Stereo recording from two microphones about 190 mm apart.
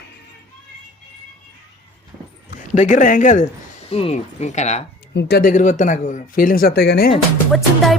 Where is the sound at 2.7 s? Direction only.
40° left (ahead or behind).